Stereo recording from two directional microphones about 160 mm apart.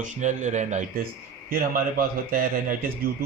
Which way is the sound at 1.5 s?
65° right (ahead or behind).